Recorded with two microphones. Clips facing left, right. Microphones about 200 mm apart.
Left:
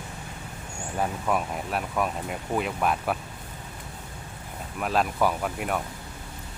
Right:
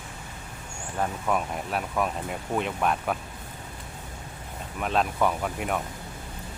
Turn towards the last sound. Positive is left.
turn(degrees=0)  # may be behind; listen again after turning